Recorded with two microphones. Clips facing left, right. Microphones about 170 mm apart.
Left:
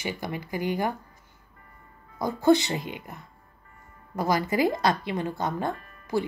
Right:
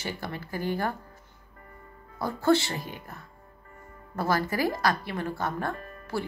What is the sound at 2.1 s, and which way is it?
Speech, 15° left (ahead or behind).